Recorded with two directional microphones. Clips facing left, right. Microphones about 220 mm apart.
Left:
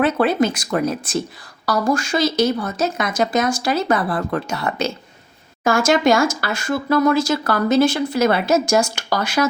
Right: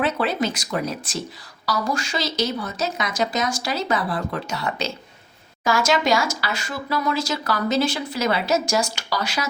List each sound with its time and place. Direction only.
0.0 s speech: 55° left (ahead or behind)